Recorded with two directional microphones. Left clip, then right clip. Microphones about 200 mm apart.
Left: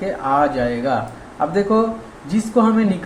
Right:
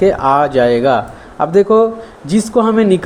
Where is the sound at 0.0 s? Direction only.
50° right (ahead or behind).